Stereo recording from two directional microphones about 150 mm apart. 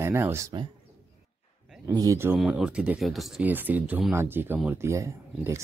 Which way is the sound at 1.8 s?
20° right (ahead or behind).